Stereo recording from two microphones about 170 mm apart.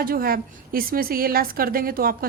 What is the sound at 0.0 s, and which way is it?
A woman's voice, 60° right (ahead or behind).